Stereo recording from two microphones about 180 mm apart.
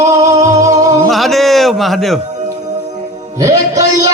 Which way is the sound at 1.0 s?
Centre (ahead or behind).